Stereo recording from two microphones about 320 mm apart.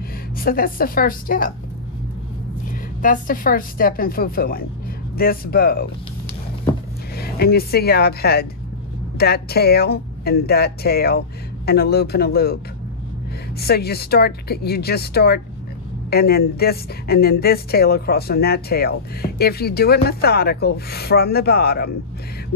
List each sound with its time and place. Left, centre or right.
0.4 s a woman's voice: left
3.0 s a woman's voice: left
7.2 s a woman's voice: left
13.6 s a woman's voice: left